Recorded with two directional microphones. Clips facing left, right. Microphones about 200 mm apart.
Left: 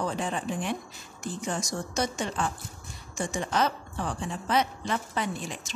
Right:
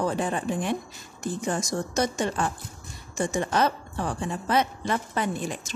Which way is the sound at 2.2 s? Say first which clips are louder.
Right 4 dB; 45° right (ahead or behind).